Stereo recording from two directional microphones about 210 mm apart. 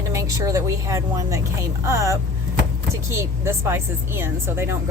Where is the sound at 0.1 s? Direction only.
15° right (ahead or behind).